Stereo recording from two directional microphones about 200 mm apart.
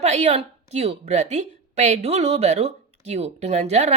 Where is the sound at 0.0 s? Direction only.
35° right (ahead or behind).